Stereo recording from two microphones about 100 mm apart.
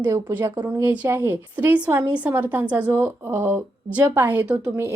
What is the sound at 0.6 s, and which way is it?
Speech, 25° right (ahead or behind).